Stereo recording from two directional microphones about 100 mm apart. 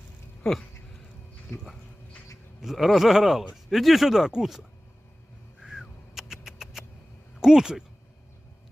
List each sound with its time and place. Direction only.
0.4 s speech: 5° left (ahead or behind)
1.5 s speech: 25° left (ahead or behind)
2.6 s speech: centre (ahead or behind)
5.6 s a sound: 5° right (ahead or behind)
7.3 s speech: 5° right (ahead or behind)